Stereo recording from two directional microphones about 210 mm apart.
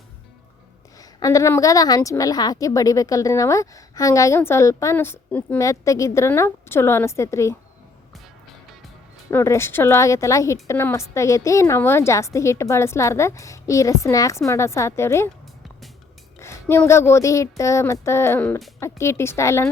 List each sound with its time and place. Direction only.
0.9 s a woman's voice: 15° left (ahead or behind)
9.3 s a woman's voice: 15° left (ahead or behind)
16.4 s a woman's voice: 10° left (ahead or behind)